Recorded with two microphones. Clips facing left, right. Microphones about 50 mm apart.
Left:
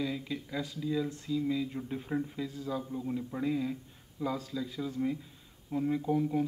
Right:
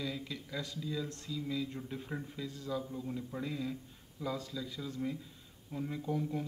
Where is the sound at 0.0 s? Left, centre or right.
Centre.